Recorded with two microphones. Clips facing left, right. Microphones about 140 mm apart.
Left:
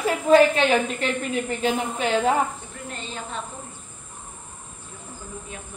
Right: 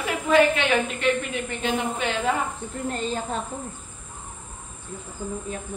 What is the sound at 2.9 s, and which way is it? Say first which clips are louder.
Speech: right 6 dB; 40° right (ahead or behind).